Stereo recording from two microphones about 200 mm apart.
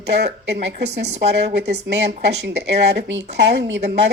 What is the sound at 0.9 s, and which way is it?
Speech, 35° right (ahead or behind).